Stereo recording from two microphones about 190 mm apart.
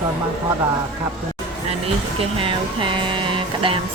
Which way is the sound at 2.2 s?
30° right (ahead or behind).